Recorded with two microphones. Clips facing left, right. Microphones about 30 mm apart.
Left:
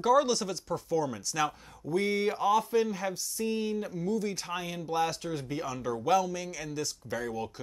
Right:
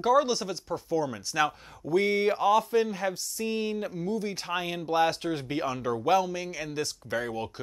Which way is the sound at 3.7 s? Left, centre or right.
Right.